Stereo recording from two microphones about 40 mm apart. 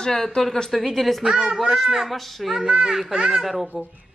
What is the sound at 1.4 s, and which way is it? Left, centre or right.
Speech, centre.